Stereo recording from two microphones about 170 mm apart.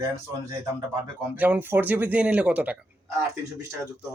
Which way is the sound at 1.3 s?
10° right (ahead or behind).